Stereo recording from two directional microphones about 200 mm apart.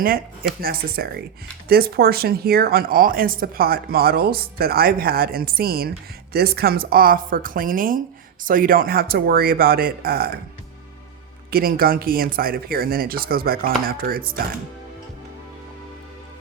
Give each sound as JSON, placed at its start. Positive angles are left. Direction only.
{"t": 0.6, "sound": "speech", "side_deg": -50}
{"t": 11.5, "sound": "speech", "side_deg": -45}